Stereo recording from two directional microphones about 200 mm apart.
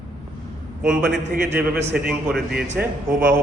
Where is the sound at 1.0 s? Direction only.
55° right (ahead or behind).